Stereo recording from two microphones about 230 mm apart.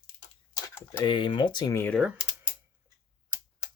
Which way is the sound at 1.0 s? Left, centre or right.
Left.